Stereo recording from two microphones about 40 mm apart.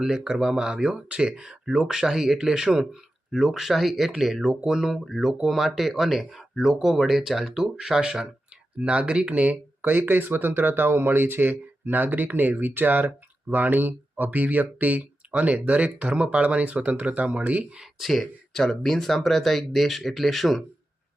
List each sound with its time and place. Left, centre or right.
0.0 s speech: centre
8.8 s speech: right
9.9 s speech: right
16.4 s speech: right
17.7 s speech: centre
18.5 s speech: centre